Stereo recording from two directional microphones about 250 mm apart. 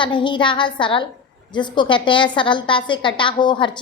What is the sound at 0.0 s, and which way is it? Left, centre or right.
A woman's voice, centre.